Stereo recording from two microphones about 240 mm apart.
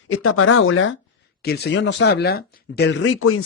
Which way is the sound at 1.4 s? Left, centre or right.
Left.